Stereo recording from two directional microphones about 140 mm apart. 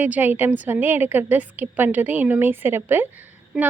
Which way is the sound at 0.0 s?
15° right (ahead or behind).